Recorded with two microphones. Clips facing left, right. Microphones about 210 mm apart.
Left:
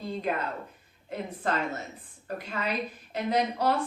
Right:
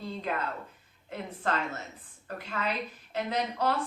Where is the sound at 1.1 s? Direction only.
10° left (ahead or behind).